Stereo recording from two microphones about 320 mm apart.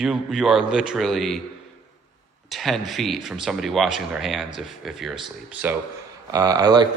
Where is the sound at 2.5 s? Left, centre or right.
Centre.